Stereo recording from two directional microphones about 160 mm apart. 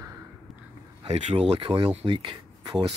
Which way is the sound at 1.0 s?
40° right (ahead or behind).